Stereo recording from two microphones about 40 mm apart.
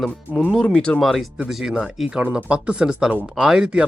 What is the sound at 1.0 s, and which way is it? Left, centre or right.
Speech, centre.